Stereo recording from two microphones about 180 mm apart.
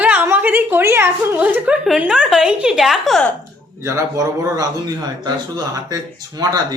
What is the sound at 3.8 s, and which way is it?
A man's voice, 15° right (ahead or behind).